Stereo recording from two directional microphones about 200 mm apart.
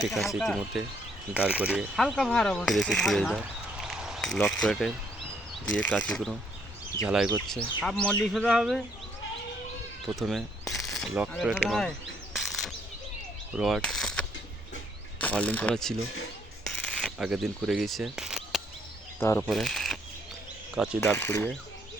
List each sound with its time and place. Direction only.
0.0 s speech: centre (ahead or behind)
10.2 s speech: centre (ahead or behind)
12.3 s bird: centre (ahead or behind)
13.6 s speech: centre (ahead or behind)
16.6 s a sound: centre (ahead or behind)
19.2 s speech: 15° left (ahead or behind)
19.5 s speech: centre (ahead or behind)
21.0 s speech: 10° left (ahead or behind)